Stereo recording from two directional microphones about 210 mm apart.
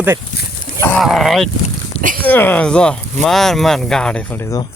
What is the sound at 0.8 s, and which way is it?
Speech, centre (ahead or behind).